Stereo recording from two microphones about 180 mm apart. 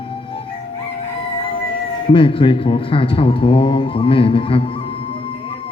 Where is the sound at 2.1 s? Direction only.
30° left (ahead or behind).